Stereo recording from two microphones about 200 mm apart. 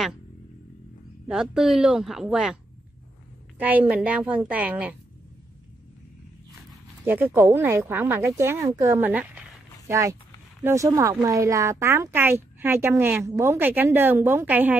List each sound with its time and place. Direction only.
1.2 s a woman's voice: 5° right (ahead or behind)
7.1 s a woman's voice: 10° right (ahead or behind)